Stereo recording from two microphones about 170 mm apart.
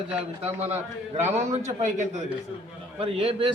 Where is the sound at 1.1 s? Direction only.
40° right (ahead or behind).